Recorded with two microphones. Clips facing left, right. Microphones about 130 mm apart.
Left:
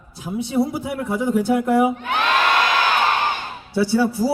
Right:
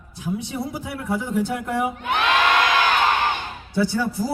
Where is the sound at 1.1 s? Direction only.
15° left (ahead or behind).